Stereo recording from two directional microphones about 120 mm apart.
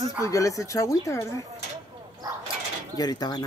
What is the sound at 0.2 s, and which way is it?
Speech, 25° left (ahead or behind).